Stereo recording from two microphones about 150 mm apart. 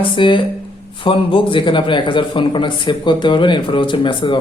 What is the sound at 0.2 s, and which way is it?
Speech, 35° left (ahead or behind).